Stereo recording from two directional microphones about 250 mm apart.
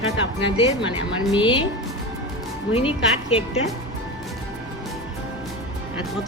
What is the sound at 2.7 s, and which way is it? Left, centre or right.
Speech, left.